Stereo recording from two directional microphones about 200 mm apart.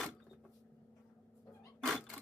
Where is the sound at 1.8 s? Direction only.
Centre (ahead or behind).